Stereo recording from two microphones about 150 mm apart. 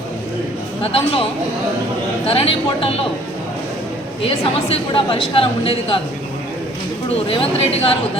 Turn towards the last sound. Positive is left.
turn(degrees=40)  # may be behind; listen again after turning